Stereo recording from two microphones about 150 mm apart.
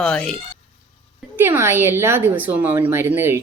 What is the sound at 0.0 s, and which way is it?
Speech, 5° left (ahead or behind).